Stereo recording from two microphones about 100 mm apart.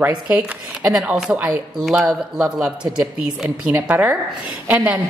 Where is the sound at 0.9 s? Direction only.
5° right (ahead or behind).